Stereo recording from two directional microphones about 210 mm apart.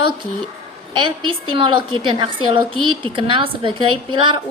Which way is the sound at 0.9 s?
20° right (ahead or behind).